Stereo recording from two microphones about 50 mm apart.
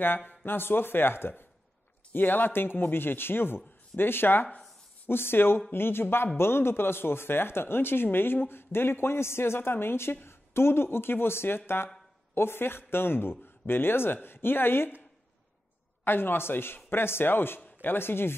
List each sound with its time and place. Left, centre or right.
0.5 s speech: left
16.0 s speech: left